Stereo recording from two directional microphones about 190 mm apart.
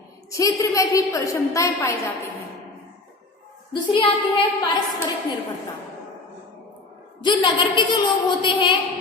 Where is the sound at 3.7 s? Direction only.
25° left (ahead or behind).